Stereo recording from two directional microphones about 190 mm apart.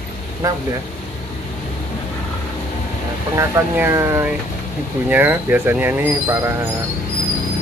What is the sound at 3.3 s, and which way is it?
Speech, 10° right (ahead or behind).